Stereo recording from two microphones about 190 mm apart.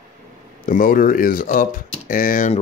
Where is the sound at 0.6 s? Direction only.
45° left (ahead or behind).